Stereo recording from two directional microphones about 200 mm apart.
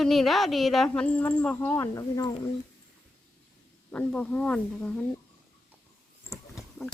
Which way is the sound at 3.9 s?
5° left (ahead or behind).